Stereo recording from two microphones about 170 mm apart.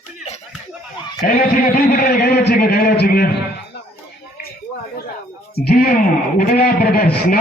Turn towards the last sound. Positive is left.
turn(degrees=65)  # may be behind; listen again after turning